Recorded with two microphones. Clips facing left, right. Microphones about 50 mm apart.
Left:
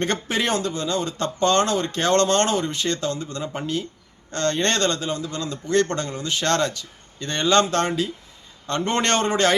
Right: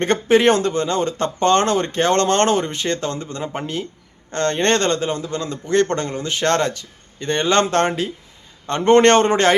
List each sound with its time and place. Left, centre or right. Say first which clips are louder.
0.0 s speech: right 9 dB; right